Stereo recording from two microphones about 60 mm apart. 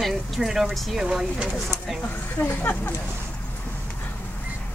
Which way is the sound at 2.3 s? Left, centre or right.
Left.